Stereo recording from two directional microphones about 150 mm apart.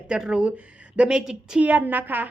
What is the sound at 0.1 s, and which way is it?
A woman's voice, 5° right (ahead or behind).